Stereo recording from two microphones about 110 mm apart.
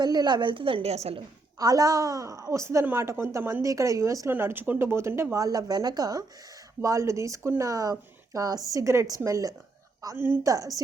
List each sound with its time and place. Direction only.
0.0 s a woman's voice: 40° right (ahead or behind); by 1.2 s 70° right (ahead or behind)
1.5 s a woman's voice: 35° right (ahead or behind)
4.3 s a woman's voice: 20° right (ahead or behind)
10.4 s speech: 30° right (ahead or behind)